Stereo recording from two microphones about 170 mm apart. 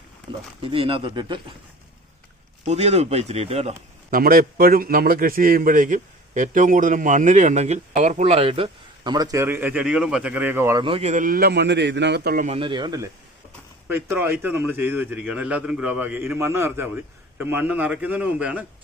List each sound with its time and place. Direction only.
0.3 s speech: 30° right (ahead or behind)
2.6 s speech: 40° right (ahead or behind)
4.1 s a man's voice: 60° right (ahead or behind); by 10.8 s 15° right (ahead or behind)
10.8 s speech: 35° right (ahead or behind)
11.1 s a man's voice: 55° right (ahead or behind)
12.5 s speech: 30° right (ahead or behind)
13.8 s a man's voice: 10° right (ahead or behind)